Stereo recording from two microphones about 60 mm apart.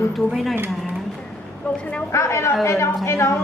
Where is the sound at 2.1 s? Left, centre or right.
Left.